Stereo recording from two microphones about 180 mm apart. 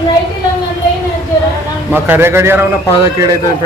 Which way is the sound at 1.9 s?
10° right (ahead or behind).